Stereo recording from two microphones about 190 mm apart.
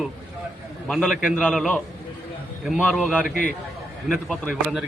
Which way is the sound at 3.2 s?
45° left (ahead or behind).